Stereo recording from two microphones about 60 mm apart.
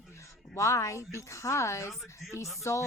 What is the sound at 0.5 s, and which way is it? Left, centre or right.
Speech, left.